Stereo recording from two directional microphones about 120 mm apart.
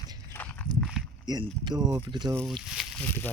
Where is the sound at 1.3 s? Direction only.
35° right (ahead or behind).